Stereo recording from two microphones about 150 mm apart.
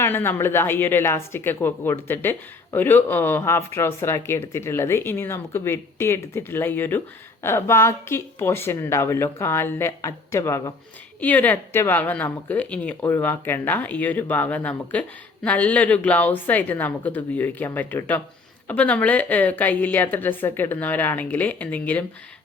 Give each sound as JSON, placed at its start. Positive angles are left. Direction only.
{"t": 0.0, "sound": "speech", "side_deg": 15}